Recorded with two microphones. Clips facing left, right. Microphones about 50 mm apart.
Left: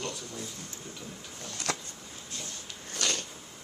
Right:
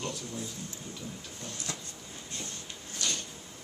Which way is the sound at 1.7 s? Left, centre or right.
Left.